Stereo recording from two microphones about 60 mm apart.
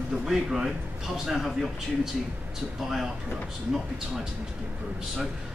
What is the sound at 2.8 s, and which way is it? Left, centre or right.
Speech, centre.